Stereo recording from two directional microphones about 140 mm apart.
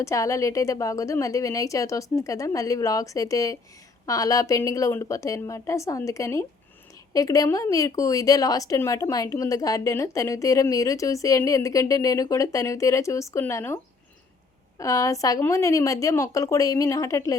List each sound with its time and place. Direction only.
0.0 s a woman's voice: 20° left (ahead or behind)
14.8 s a woman's voice: 20° left (ahead or behind)